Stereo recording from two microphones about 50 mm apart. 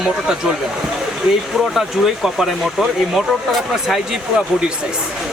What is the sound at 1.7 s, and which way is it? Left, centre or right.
Speech, centre.